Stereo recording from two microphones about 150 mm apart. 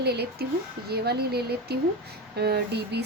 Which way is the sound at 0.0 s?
90° right.